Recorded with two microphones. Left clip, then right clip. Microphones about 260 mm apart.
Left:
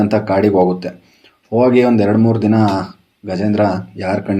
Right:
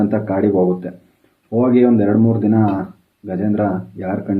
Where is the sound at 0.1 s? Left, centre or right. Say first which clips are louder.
Left 4 dB; left.